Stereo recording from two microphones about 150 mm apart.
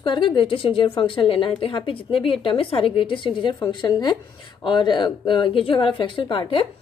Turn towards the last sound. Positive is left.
turn(degrees=35)  # may be behind; listen again after turning